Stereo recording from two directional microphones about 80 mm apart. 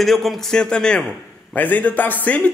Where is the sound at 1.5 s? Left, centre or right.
Left.